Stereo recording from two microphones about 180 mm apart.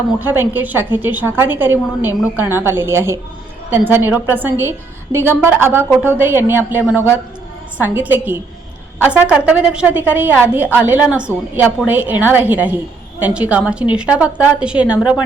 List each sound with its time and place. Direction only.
0.2 s a woman's voice: 10° right (ahead or behind)